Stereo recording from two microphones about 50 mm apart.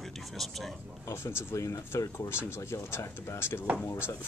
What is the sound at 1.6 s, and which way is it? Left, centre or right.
Speech, left.